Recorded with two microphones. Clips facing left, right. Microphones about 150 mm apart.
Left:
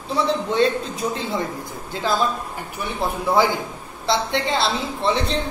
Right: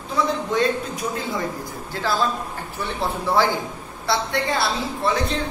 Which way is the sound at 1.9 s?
20° left (ahead or behind).